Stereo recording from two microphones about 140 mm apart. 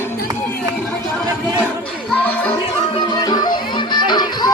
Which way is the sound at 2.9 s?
30° left (ahead or behind).